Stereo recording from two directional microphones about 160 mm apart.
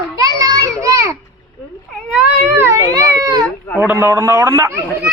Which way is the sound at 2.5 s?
15° right (ahead or behind).